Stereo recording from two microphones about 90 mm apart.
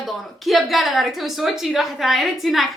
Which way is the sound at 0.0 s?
Centre (ahead or behind).